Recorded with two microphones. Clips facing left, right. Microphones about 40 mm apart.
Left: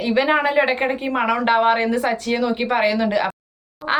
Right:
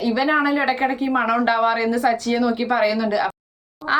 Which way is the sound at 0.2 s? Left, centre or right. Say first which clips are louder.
Left 3 dB; left.